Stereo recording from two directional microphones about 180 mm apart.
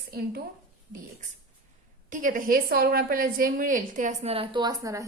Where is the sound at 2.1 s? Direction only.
50° right (ahead or behind).